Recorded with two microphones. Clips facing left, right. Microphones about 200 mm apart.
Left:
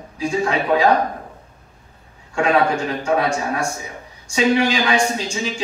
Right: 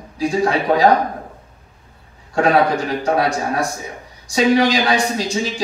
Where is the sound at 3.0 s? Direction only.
35° right (ahead or behind).